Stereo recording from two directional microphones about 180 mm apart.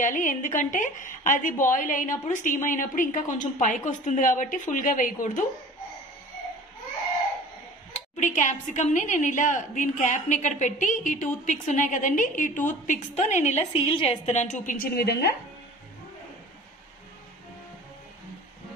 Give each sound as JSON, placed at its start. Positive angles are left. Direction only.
{"t": 0.0, "sound": "a woman's voice", "side_deg": 45}
{"t": 8.2, "sound": "a woman's voice", "side_deg": 45}